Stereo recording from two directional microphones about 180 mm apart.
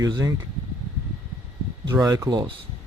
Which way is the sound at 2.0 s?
20° right (ahead or behind).